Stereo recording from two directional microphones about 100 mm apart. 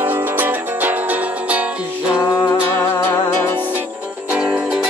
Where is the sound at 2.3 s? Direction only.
35° left (ahead or behind).